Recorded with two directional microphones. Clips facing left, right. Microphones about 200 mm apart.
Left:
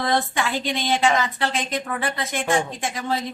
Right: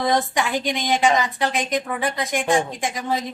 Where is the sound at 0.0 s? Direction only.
15° right (ahead or behind).